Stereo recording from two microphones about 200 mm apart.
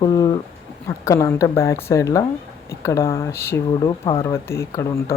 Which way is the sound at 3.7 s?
25° left (ahead or behind).